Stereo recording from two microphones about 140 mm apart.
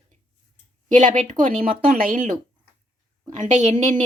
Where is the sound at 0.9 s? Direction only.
60° right (ahead or behind).